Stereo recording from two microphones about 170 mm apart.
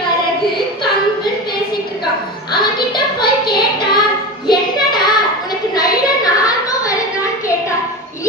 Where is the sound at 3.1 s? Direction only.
25° left (ahead or behind).